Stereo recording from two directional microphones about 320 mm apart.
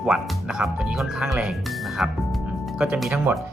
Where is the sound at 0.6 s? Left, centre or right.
Centre.